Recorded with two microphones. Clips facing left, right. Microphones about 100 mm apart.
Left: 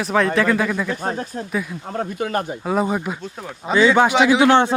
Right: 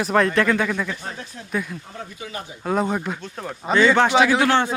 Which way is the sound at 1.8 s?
55° left (ahead or behind).